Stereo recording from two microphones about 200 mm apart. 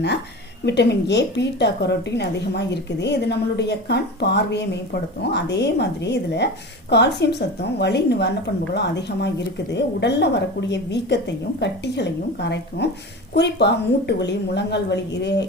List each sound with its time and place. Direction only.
0.6 s a woman's voice: 60° left (ahead or behind)